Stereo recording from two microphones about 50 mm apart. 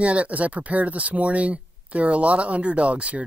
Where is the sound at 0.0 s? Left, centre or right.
Right.